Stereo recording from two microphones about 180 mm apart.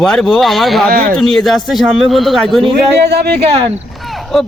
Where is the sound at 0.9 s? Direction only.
55° right (ahead or behind).